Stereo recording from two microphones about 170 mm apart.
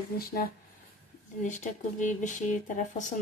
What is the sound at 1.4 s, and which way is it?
Speech, 45° left (ahead or behind).